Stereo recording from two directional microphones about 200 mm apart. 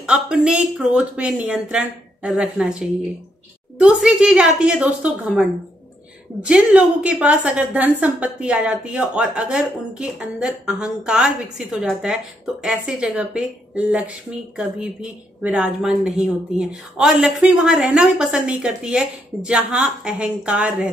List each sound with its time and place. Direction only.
0.0 s speech: 5° right (ahead or behind)